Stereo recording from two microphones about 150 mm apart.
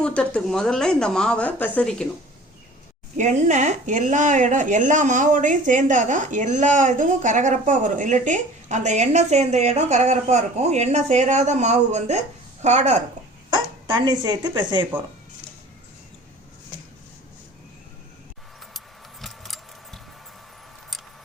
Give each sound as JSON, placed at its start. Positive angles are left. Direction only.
{"t": 0.0, "sound": "a woman's voice", "side_deg": 5}
{"t": 3.2, "sound": "speech", "side_deg": -55}
{"t": 13.5, "sound": "speech", "side_deg": -30}
{"t": 19.2, "sound": "keys jangling", "side_deg": 0}